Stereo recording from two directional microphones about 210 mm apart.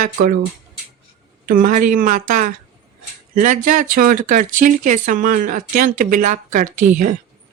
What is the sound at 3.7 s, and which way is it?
Speech, 40° right (ahead or behind).